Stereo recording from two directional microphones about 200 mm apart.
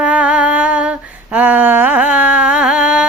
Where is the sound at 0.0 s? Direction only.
5° right (ahead or behind).